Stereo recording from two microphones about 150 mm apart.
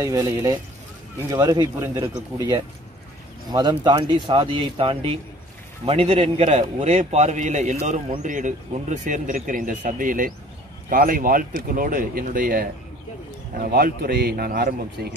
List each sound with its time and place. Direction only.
0.0 s a man's voice: 20° right (ahead or behind); by 12.6 s 70° right (ahead or behind)
13.6 s a man's voice: 80° right